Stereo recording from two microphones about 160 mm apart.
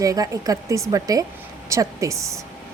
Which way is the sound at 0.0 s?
20° right (ahead or behind).